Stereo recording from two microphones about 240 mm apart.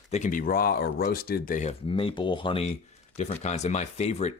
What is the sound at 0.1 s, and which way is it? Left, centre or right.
Speech, left.